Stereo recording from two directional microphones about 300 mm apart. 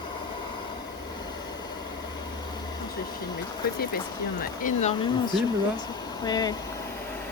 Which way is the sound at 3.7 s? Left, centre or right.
Left.